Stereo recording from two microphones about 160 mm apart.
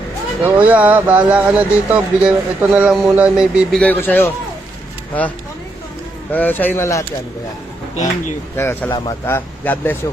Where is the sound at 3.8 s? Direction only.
10° left (ahead or behind).